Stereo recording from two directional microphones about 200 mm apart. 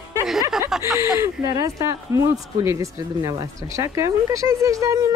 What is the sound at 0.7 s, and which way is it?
Speech, centre (ahead or behind).